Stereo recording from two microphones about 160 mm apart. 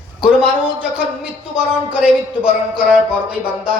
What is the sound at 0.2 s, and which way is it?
Speech, 5° right (ahead or behind).